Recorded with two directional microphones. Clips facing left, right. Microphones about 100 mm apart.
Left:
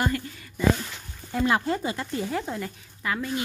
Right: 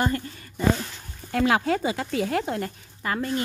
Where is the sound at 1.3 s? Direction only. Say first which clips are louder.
Right 2 dB; 90° right; by 2.7 s 60° right (ahead or behind).